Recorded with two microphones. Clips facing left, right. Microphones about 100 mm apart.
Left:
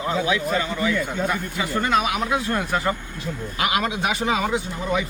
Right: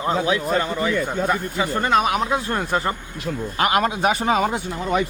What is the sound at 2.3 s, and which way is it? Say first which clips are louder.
Speech: right 1 dB; 30° right (ahead or behind).